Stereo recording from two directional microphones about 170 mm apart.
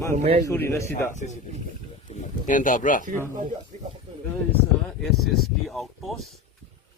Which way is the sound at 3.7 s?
40° right (ahead or behind).